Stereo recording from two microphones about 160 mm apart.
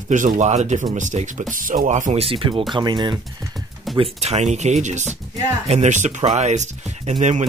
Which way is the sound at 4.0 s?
45° right (ahead or behind).